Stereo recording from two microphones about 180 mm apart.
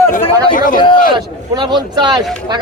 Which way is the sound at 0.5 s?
50° left (ahead or behind).